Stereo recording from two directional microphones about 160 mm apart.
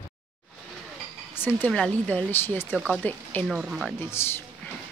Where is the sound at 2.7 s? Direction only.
Centre (ahead or behind).